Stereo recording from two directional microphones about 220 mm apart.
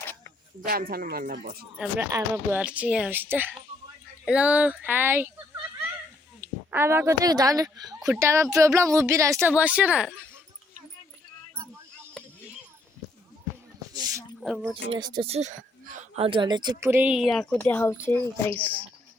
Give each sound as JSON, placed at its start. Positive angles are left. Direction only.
{"t": 0.0, "sound": "a sound", "side_deg": 10}
{"t": 0.7, "sound": "speech", "side_deg": -40}
{"t": 1.8, "sound": "speech", "side_deg": -10}
{"t": 6.4, "sound": "speech", "side_deg": -10}
{"t": 11.5, "sound": "keys jangling", "side_deg": -15}
{"t": 13.9, "sound": "a sound", "side_deg": -15}
{"t": 14.4, "sound": "speech", "side_deg": 0}
{"t": 14.8, "sound": "speech", "side_deg": -20}